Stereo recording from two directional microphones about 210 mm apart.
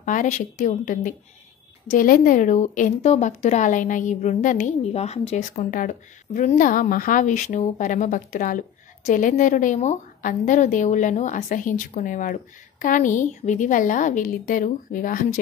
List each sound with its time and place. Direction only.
0.0 s a woman's voice: 40° left (ahead or behind)